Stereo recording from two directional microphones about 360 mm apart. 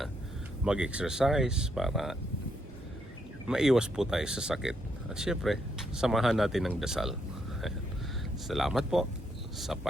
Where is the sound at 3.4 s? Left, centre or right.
Centre.